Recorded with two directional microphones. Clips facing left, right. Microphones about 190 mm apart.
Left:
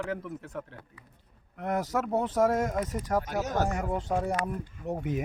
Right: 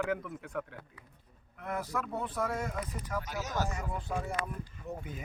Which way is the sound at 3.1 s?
55° left (ahead or behind).